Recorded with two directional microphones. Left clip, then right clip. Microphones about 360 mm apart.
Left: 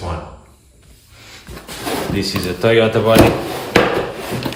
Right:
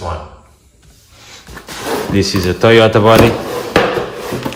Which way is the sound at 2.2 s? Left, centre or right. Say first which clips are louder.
Right 6 dB; right.